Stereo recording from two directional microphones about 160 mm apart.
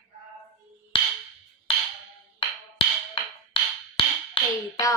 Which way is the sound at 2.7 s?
35° left (ahead or behind).